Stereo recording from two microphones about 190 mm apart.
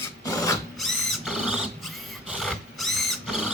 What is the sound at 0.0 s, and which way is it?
Drill, 15° left (ahead or behind).